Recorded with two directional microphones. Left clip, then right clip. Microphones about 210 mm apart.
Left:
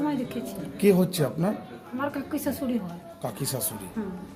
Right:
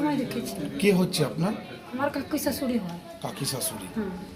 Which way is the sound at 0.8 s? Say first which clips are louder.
Left 2 dB; 55° left (ahead or behind).